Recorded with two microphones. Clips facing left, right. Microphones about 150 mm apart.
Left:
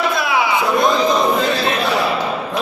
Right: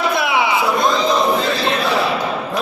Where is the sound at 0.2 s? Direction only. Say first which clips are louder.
Even; 25° right (ahead or behind).